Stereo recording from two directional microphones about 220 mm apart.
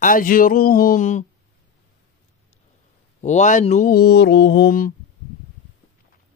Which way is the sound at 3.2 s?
35° left (ahead or behind).